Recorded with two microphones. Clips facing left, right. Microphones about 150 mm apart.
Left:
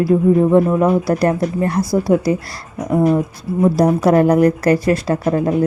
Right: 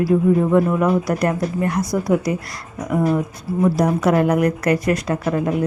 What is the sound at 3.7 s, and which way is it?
Speech, 35° left (ahead or behind).